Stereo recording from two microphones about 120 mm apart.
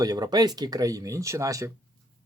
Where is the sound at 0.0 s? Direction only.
30° right (ahead or behind).